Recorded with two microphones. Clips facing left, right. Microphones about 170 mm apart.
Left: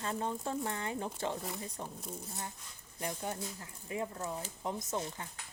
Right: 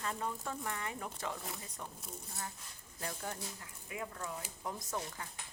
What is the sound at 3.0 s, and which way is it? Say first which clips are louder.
Speech: left 4 dB; 20° left (ahead or behind).